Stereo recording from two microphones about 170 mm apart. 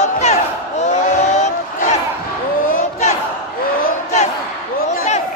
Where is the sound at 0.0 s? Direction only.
40° left (ahead or behind).